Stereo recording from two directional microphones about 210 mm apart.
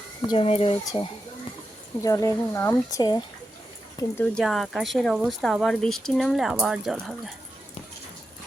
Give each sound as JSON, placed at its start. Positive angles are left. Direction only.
{"t": 0.2, "sound": "speech", "side_deg": 25}
{"t": 4.2, "sound": "speech", "side_deg": 0}